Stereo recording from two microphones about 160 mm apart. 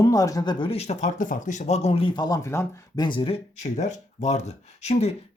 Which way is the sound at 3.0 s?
30° left (ahead or behind).